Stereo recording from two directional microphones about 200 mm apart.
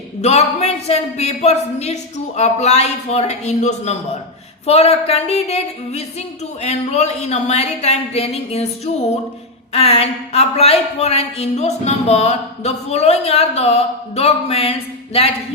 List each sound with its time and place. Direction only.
0.2 s speech: 30° left (ahead or behind)